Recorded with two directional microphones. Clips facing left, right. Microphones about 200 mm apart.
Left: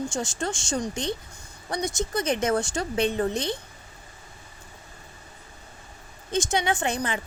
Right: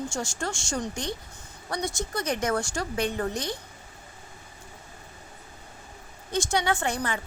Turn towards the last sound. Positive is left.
turn(degrees=20)  # may be behind; listen again after turning